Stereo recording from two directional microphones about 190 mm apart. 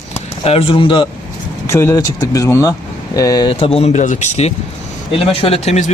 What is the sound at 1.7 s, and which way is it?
Speech, 15° left (ahead or behind).